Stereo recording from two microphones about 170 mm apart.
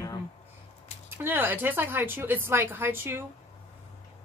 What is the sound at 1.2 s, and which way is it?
A woman's voice, 10° right (ahead or behind).